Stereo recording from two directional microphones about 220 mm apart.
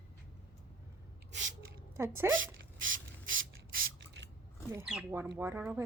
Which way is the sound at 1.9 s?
10° right (ahead or behind).